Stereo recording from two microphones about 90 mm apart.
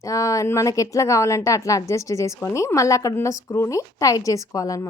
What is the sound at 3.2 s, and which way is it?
A woman's voice, 25° left (ahead or behind).